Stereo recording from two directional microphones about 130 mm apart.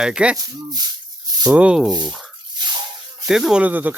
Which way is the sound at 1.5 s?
5° right (ahead or behind).